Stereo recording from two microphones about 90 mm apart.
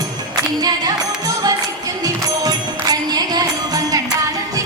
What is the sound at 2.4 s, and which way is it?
Music, 45° right (ahead or behind).